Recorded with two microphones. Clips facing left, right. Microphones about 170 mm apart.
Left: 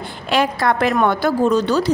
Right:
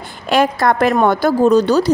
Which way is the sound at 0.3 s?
45° right (ahead or behind).